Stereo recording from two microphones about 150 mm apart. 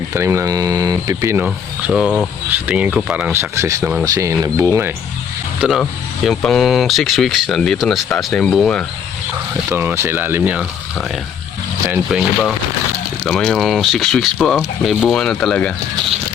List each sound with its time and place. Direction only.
0.1 s speech: 20° right (ahead or behind)
1.5 s speech: 5° right (ahead or behind)
3.5 s speech: 20° right (ahead or behind)
5.5 s speech: centre (ahead or behind)
9.6 s speech: 15° right (ahead or behind)
11.9 s speech: 5° right (ahead or behind)
13.2 s speech: 5° left (ahead or behind)